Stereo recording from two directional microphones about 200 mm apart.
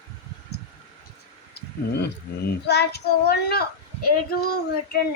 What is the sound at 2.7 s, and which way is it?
Child singing, 55° left (ahead or behind).